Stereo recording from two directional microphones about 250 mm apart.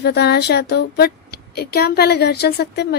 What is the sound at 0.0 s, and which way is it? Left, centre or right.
Child singing, left.